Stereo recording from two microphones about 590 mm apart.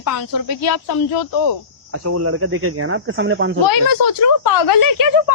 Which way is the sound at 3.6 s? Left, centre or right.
Left.